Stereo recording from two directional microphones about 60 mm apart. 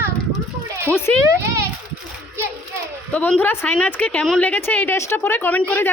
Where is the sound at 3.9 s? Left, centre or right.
Left.